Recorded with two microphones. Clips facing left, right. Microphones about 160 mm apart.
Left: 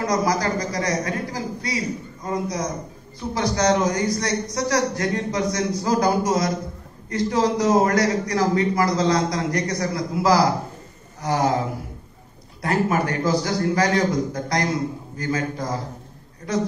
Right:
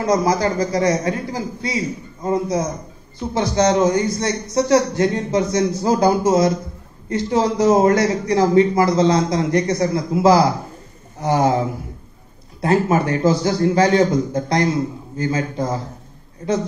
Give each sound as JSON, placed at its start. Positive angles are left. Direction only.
{"t": 0.0, "sound": "a man's voice", "side_deg": -25}
{"t": 12.6, "sound": "a man's voice", "side_deg": -25}